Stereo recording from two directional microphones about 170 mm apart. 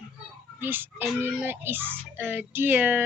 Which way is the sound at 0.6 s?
10° right (ahead or behind).